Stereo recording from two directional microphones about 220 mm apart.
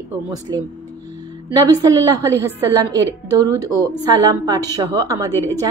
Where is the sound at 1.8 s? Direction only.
15° right (ahead or behind).